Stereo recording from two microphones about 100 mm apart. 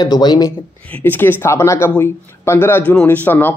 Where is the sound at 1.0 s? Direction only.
20° left (ahead or behind).